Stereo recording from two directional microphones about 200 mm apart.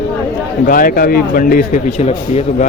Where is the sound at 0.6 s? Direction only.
45° left (ahead or behind).